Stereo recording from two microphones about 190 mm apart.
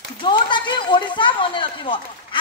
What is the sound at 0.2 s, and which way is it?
Speech, 25° left (ahead or behind).